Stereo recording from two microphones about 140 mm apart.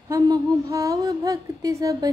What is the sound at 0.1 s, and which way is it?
Music, 25° right (ahead or behind).